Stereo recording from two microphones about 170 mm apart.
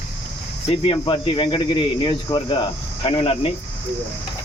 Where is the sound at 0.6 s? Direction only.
35° left (ahead or behind).